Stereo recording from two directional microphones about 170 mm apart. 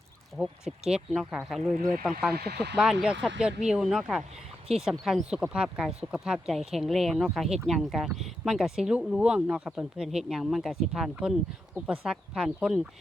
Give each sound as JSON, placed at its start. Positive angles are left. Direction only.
{"t": 0.3, "sound": "speech", "side_deg": -5}
{"t": 2.3, "sound": "speech", "side_deg": -70}
{"t": 2.7, "sound": "speech", "side_deg": -5}